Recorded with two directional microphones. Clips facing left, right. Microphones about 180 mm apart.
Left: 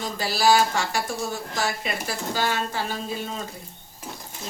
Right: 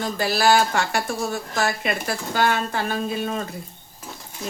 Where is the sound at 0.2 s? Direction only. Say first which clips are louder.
Right 1 dB; 60° right (ahead or behind).